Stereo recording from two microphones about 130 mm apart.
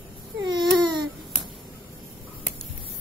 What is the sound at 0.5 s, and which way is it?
Baby cry, 35° right (ahead or behind).